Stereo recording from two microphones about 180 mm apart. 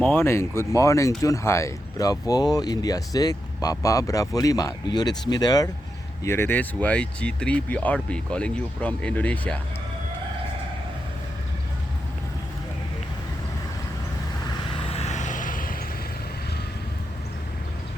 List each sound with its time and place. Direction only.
0.0 s speech: 10° left (ahead or behind)
14.8 s vehicle: 35° left (ahead or behind)